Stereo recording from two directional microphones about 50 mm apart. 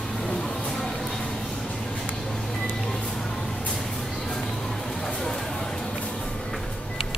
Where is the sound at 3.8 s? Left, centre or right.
Centre.